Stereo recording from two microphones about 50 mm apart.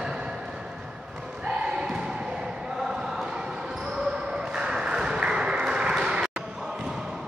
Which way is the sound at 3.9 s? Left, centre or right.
Centre.